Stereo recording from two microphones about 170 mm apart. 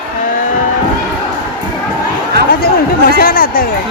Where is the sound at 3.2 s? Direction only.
60° left (ahead or behind).